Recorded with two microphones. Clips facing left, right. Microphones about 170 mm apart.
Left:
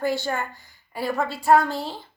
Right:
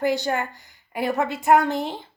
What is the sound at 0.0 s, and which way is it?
Speech, 15° right (ahead or behind).